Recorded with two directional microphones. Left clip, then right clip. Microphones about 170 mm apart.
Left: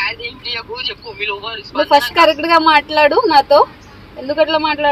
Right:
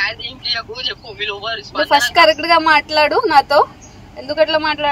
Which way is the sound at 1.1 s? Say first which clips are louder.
Even; 15° right (ahead or behind).